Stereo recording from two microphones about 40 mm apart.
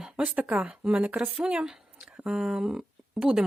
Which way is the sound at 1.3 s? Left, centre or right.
Right.